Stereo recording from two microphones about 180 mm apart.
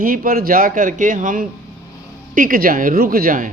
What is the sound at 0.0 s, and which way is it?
Speech, 50° right (ahead or behind).